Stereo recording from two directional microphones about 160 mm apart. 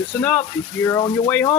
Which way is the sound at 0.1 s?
10° left (ahead or behind).